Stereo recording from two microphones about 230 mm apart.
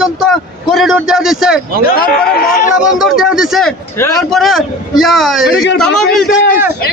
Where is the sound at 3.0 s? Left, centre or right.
Centre.